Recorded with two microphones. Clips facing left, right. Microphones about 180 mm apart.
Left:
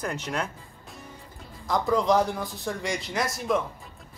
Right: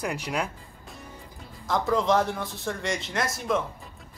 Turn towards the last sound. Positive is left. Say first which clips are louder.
# left 1 dB
turn(degrees=0)  # may be behind; listen again after turning